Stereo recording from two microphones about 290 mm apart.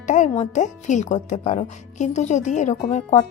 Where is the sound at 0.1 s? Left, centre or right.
Left.